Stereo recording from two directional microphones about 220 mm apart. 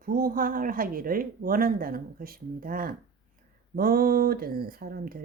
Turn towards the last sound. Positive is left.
turn(degrees=-40)  # may be behind; listen again after turning